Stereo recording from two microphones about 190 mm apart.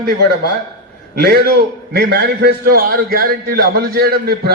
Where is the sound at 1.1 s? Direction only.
55° right (ahead or behind).